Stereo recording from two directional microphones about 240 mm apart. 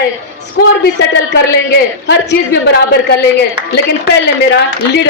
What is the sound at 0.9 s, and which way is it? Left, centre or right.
A woman's voice, left.